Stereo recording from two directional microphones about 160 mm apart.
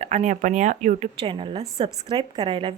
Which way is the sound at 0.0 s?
45° right (ahead or behind).